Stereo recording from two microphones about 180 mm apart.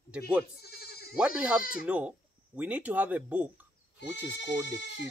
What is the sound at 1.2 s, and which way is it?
Speech, 5° right (ahead or behind).